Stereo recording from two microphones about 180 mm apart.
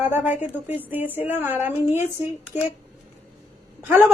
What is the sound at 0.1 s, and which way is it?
A woman's voice, 10° right (ahead or behind).